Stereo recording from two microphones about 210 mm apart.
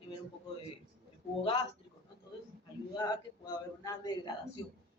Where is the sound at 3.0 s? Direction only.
20° left (ahead or behind).